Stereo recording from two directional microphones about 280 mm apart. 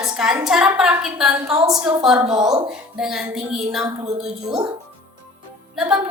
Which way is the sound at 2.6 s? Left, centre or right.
Centre.